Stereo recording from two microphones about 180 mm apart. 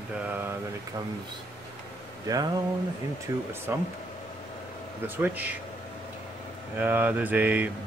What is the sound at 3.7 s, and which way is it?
Speech, 10° right (ahead or behind).